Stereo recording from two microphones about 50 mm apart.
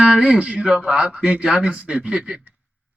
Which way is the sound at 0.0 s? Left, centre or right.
Centre.